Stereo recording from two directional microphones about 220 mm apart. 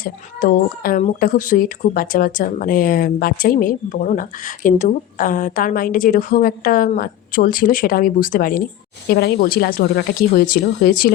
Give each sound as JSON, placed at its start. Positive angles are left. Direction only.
{"t": 0.0, "sound": "speech", "side_deg": 40}